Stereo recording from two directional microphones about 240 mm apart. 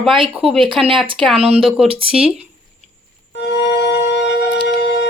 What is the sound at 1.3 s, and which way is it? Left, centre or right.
Speech, right.